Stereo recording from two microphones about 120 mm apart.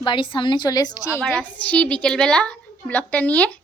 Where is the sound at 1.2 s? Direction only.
10° left (ahead or behind).